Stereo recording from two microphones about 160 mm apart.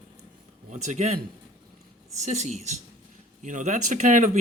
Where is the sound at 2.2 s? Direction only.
45° right (ahead or behind).